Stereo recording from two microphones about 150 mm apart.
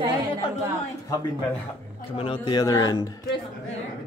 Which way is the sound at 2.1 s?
35° left (ahead or behind).